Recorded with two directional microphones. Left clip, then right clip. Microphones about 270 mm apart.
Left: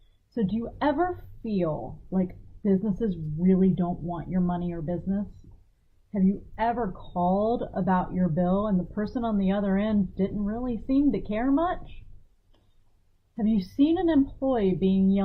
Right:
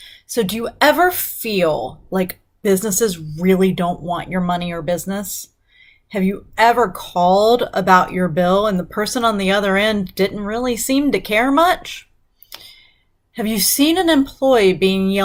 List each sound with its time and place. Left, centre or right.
0.8 s speech: centre
7.1 s speech: right
7.5 s speech: centre
13.3 s speech: centre